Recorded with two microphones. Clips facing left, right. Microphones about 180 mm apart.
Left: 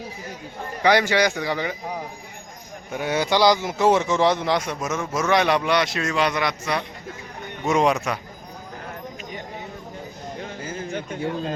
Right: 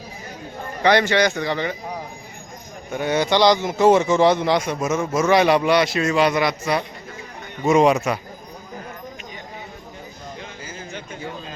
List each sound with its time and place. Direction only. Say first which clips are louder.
0.8 s a man's voice: right 2 dB; 10° left (ahead or behind)
2.9 s a man's voice: right 2 dB; 5° left (ahead or behind)
10.4 s a sound: left 4 dB; 50° left (ahead or behind)